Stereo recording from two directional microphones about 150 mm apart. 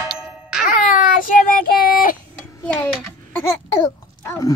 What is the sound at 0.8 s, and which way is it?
Child singing, 65° left (ahead or behind).